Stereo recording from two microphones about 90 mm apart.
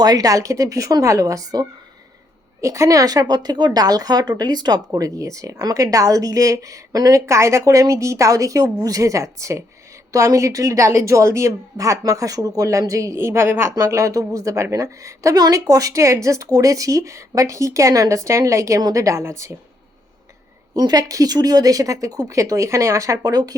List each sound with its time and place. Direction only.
0.0 s speech: 45° right (ahead or behind)
20.7 s speech: 45° right (ahead or behind)